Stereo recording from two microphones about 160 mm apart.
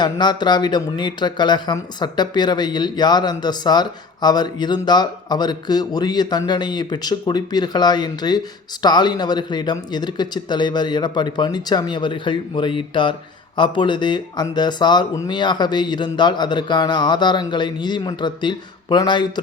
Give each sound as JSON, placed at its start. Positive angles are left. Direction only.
{"t": 0.0, "sound": "speech", "side_deg": 25}